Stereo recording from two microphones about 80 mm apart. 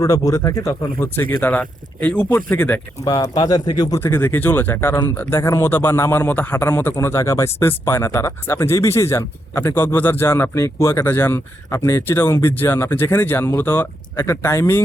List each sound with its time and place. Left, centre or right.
0.0 s speech: left
3.0 s speech: left
4.0 s speech: left